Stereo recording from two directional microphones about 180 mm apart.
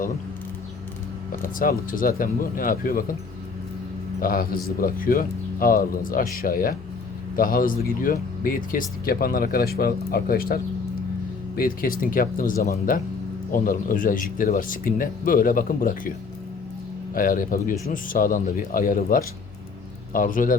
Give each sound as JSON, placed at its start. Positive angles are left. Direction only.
{"t": 1.3, "sound": "speech", "side_deg": 50}
{"t": 4.2, "sound": "speech", "side_deg": 55}
{"t": 17.2, "sound": "speech", "side_deg": 50}